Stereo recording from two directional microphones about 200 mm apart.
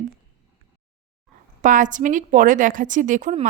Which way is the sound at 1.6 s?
40° right (ahead or behind).